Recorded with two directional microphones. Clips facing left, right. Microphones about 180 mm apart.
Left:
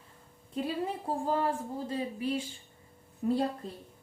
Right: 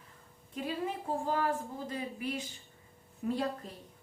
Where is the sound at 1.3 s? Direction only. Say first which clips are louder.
Left 3 dB; 30° left (ahead or behind).